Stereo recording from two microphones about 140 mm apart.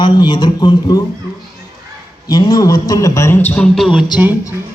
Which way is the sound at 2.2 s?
30° left (ahead or behind).